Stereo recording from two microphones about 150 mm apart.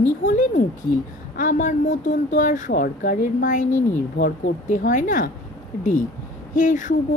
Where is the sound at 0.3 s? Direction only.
55° left (ahead or behind).